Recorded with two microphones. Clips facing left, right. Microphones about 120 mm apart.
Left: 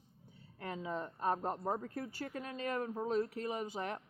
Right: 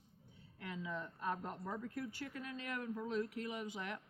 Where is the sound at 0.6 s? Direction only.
40° left (ahead or behind).